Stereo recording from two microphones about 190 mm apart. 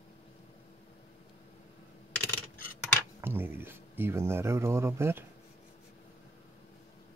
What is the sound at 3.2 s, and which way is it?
Speech, 10° right (ahead or behind).